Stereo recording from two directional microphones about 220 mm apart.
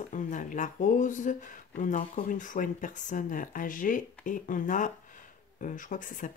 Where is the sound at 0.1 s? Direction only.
35° left (ahead or behind).